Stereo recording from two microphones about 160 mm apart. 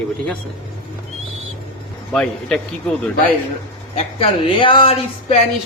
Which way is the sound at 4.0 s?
35° left (ahead or behind).